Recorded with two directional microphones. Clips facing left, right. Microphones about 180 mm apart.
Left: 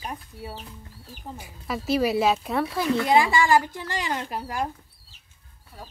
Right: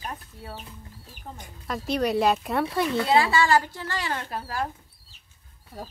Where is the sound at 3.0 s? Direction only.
15° left (ahead or behind).